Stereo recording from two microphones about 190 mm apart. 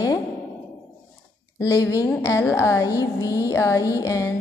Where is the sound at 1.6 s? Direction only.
15° left (ahead or behind).